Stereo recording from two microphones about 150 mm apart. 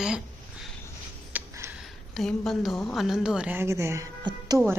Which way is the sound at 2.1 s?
Centre (ahead or behind).